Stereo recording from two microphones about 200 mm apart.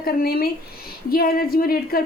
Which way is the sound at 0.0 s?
50° left (ahead or behind).